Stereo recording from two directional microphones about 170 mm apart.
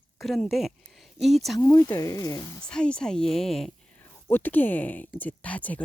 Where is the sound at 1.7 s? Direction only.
20° left (ahead or behind).